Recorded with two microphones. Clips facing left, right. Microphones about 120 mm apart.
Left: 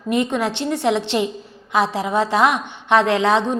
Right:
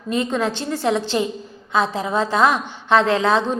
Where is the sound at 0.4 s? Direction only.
65° left (ahead or behind).